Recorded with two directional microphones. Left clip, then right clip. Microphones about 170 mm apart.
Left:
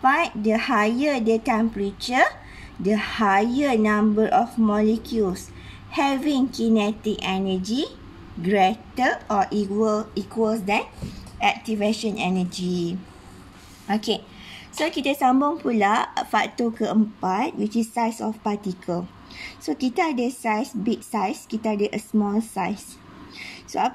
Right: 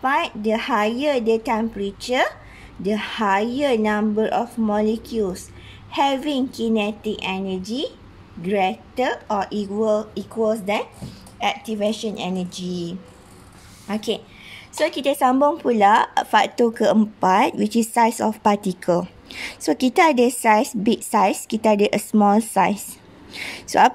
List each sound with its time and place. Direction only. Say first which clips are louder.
0.0 s a woman's voice: left 1 dB; 5° right (ahead or behind)
13.8 s a woman's voice: left 1 dB; 15° right (ahead or behind); by 23.9 s 40° right (ahead or behind)